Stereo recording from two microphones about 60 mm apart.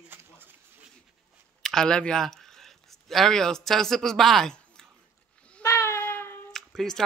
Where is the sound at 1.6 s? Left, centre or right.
Centre.